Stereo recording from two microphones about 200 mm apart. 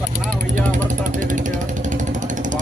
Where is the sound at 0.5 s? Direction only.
40° right (ahead or behind).